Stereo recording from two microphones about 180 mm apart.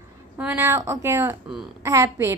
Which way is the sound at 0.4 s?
10° right (ahead or behind).